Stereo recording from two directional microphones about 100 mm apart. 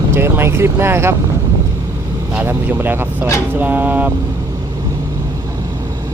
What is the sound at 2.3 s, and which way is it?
Speech, 20° right (ahead or behind).